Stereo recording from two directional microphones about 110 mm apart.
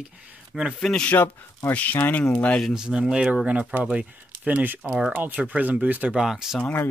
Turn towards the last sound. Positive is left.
turn(degrees=15)  # may be behind; listen again after turning